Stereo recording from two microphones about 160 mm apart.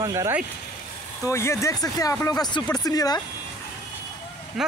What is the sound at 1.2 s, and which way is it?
Speech, 15° left (ahead or behind).